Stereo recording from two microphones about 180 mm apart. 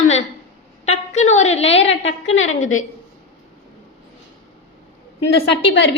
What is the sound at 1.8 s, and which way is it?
Speech, 90° left.